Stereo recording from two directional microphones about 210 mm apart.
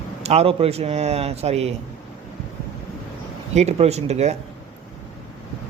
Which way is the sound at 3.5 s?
30° right (ahead or behind).